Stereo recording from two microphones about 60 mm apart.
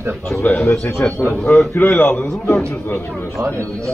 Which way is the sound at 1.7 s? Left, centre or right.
Left.